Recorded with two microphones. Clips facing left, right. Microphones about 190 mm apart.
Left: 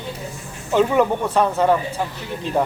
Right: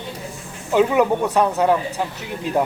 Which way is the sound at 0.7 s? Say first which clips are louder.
Right 1 dB; 5° right (ahead or behind).